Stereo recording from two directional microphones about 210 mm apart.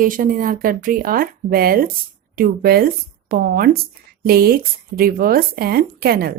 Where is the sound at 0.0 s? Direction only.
40° right (ahead or behind).